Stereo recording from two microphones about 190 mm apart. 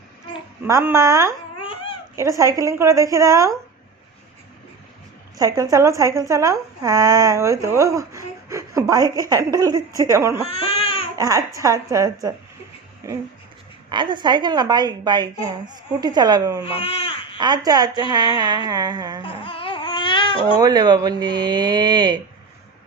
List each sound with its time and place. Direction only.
0.7 s speech: 15° right (ahead or behind)
1.6 s baby cry: 30° left (ahead or behind)
2.1 s speech: 15° right (ahead or behind)
5.4 s speech: 20° right (ahead or behind)
10.4 s baby cry: 30° left (ahead or behind)
11.2 s a woman's voice: 15° right (ahead or behind)
16.6 s speech: 30° left (ahead or behind)
17.4 s a woman's voice: 20° right (ahead or behind)
19.2 s baby cry: 25° left (ahead or behind)
20.6 s a woman's voice: 20° right (ahead or behind)